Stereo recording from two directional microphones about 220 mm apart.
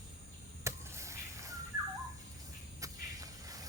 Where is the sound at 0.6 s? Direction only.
15° right (ahead or behind).